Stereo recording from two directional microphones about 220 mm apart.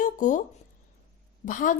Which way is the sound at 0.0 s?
35° left (ahead or behind).